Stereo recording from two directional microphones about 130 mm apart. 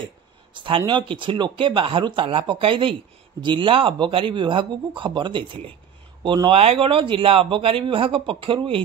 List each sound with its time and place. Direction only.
0.6 s speech: 40° right (ahead or behind)